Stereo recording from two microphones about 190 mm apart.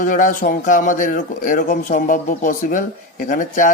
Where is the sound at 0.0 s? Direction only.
45° left (ahead or behind).